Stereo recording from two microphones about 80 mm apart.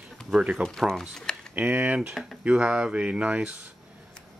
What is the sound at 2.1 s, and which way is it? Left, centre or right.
Speech, centre.